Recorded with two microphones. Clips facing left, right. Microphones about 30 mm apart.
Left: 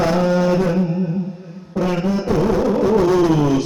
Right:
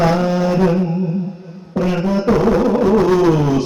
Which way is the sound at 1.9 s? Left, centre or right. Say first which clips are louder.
Right 2 dB; right.